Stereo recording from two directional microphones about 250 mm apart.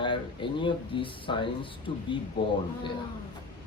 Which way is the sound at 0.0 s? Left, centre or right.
Centre.